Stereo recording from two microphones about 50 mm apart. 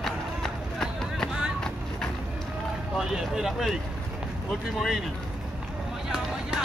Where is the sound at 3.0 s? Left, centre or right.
Centre.